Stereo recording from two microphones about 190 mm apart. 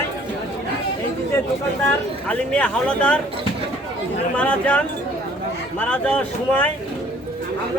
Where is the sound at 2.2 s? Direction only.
5° left (ahead or behind).